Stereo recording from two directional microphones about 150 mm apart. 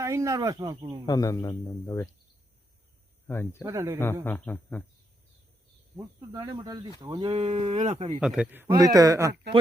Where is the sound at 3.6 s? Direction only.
20° right (ahead or behind).